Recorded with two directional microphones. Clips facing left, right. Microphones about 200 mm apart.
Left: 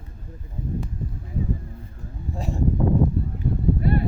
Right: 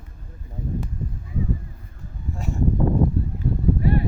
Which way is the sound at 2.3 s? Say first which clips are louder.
Left 1 dB; 35° left (ahead or behind).